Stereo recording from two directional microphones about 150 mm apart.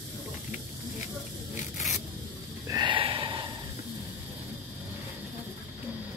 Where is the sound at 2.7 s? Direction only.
30° right (ahead or behind).